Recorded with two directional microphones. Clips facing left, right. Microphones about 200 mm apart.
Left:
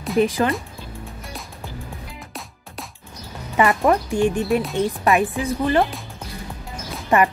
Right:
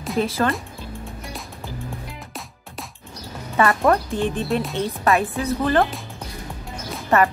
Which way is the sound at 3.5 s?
15° left (ahead or behind).